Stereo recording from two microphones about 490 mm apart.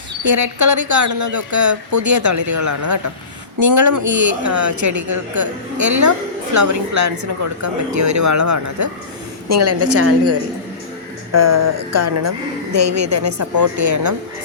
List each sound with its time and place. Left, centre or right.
0.3 s a woman's voice: right